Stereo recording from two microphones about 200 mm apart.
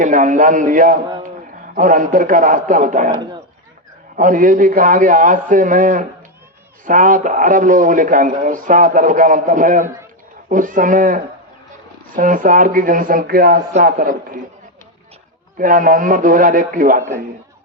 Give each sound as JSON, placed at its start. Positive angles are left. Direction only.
{"t": 0.0, "sound": "a man's voice", "side_deg": -40}
{"t": 4.2, "sound": "a man's voice", "side_deg": -40}
{"t": 15.5, "sound": "speech", "side_deg": -45}